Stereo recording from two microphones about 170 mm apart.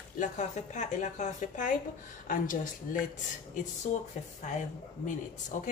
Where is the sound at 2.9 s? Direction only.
55° left (ahead or behind).